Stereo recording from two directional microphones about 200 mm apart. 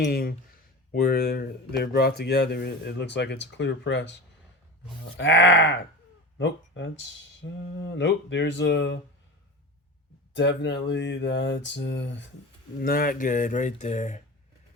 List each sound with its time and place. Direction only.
0.0 s speech: 50° left (ahead or behind)
5.1 s speech: 65° left (ahead or behind)
10.3 s speech: 60° left (ahead or behind)
12.8 s speech: 45° left (ahead or behind)